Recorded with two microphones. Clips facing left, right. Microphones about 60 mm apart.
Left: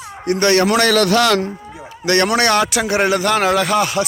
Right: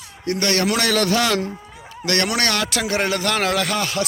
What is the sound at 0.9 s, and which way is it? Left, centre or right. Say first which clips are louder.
Speech: left 5 dB; left.